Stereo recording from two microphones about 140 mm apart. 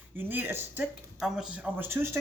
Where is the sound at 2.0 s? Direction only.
20° right (ahead or behind).